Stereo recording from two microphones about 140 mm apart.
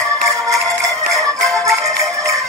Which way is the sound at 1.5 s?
20° right (ahead or behind).